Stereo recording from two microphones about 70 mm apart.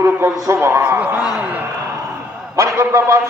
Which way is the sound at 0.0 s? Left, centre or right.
Right.